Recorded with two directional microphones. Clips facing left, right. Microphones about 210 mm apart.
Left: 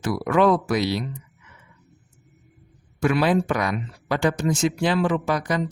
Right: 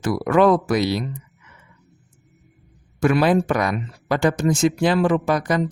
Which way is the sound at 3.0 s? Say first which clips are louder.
Right 3 dB; 45° right (ahead or behind).